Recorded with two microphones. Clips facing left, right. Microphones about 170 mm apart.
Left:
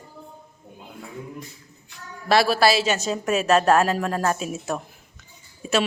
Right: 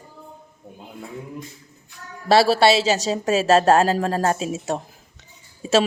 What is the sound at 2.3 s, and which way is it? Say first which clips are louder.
A woman's voice: right 3 dB; 30° right (ahead or behind).